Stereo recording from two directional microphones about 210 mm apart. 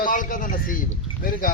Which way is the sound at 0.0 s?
40° left (ahead or behind).